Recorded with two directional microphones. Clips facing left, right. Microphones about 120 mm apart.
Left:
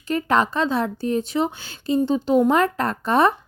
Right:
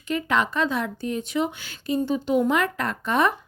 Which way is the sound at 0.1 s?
40° left (ahead or behind).